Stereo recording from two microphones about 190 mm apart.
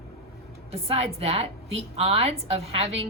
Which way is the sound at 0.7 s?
30° right (ahead or behind).